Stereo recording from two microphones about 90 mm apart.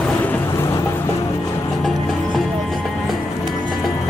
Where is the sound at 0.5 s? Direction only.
30° left (ahead or behind).